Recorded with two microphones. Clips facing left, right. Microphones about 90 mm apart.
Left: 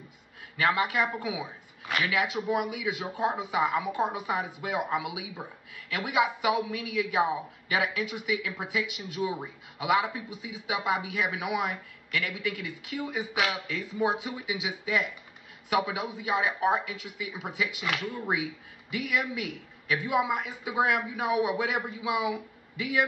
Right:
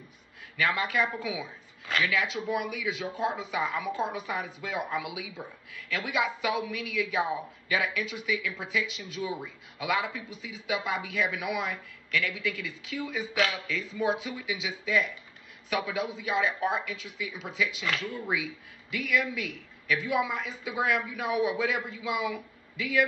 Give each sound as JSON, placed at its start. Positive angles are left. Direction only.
{"t": 0.6, "sound": "a man's voice", "side_deg": 20}